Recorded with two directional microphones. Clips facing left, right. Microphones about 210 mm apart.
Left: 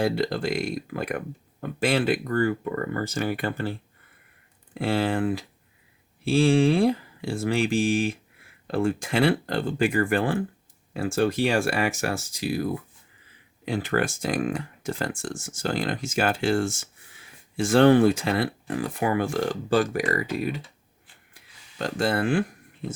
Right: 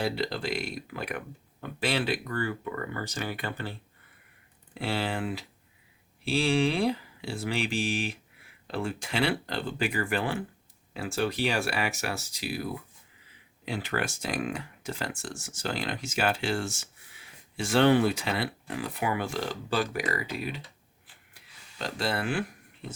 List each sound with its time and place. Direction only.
0.0 s speech: 50° left (ahead or behind)
13.7 s speech: 45° left (ahead or behind)
21.8 s speech: 45° left (ahead or behind)